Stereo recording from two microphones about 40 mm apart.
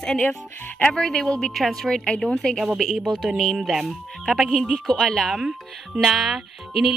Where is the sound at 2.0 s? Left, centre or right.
Centre.